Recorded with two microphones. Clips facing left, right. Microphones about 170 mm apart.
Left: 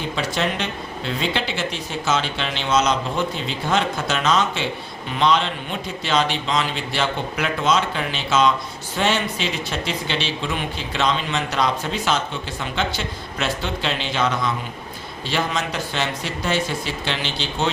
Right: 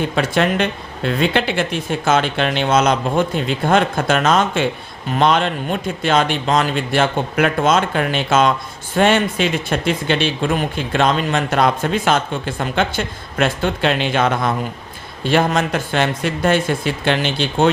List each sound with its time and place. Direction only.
0.0 s speech: 55° right (ahead or behind)